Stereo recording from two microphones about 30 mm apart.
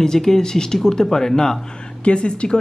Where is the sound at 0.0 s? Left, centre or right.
Centre.